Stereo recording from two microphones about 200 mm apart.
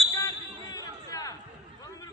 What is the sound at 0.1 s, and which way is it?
Basketball bounce, 15° left (ahead or behind).